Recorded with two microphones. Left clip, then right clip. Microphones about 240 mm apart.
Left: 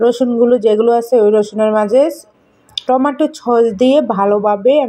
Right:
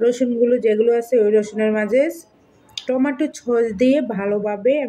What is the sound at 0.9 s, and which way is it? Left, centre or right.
Speech, left.